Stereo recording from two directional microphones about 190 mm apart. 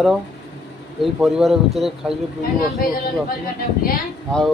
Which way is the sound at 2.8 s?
50° left (ahead or behind).